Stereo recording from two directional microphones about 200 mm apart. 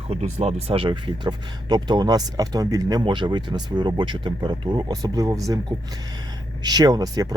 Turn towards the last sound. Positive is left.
turn(degrees=-20)  # may be behind; listen again after turning